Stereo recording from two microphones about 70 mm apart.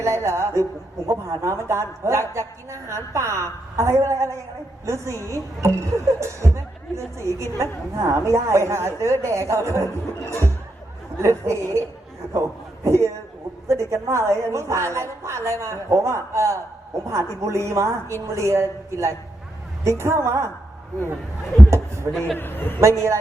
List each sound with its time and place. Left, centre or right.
0.0 s a woman's voice: right
21.7 s a woman's voice: right
22.4 s a man's voice: left
22.8 s a woman's voice: right